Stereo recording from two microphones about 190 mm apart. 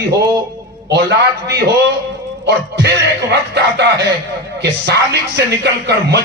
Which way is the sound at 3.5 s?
60° right (ahead or behind).